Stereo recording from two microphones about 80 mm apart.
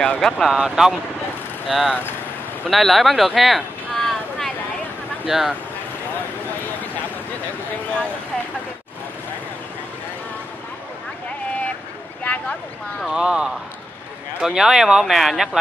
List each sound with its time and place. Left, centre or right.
0.0 s speech: centre
0.4 s speech: centre
2.7 s a sound: centre
5.2 s speech: centre
12.2 s a sound: centre
13.1 s speech: centre